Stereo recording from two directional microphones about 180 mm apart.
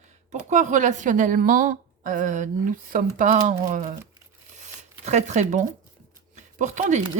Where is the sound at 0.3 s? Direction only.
40° right (ahead or behind).